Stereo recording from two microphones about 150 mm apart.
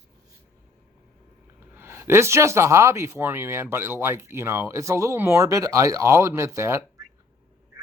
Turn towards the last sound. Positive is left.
turn(degrees=-20)  # may be behind; listen again after turning